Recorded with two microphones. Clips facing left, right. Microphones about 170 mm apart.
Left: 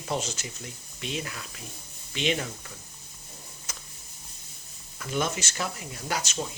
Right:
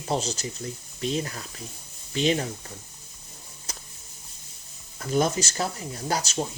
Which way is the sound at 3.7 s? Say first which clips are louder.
Right 3 dB; 35° right (ahead or behind).